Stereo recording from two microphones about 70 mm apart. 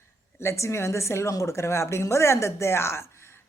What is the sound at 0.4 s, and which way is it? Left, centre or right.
Speech, left.